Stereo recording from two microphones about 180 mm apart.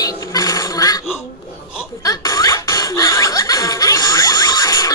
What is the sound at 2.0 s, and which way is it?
Snicker, 20° left (ahead or behind).